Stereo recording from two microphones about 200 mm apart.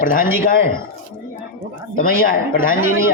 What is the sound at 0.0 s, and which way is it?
Speech, 45° left (ahead or behind).